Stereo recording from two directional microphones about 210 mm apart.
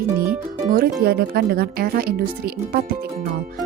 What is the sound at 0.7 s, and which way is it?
Speech, 45° right (ahead or behind).